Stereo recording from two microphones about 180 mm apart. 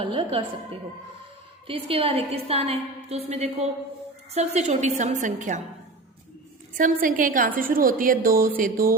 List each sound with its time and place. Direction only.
0.0 s a woman's voice: 30° right (ahead or behind)
1.6 s a woman's voice: 30° right (ahead or behind)
6.7 s a woman's voice: 50° right (ahead or behind)